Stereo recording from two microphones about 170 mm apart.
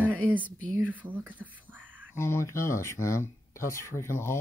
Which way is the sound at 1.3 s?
10° right (ahead or behind).